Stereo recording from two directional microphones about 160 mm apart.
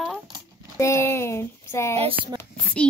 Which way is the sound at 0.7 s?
15° left (ahead or behind).